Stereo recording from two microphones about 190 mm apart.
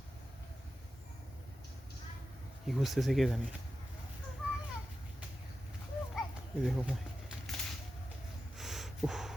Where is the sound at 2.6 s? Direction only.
Centre (ahead or behind).